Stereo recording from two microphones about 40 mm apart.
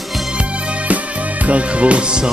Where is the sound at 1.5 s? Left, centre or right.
Right.